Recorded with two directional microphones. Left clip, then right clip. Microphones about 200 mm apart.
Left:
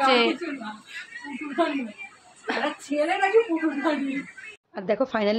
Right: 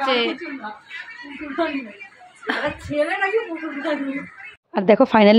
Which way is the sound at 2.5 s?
10° right (ahead or behind).